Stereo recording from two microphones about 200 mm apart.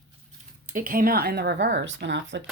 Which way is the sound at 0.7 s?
45° right (ahead or behind).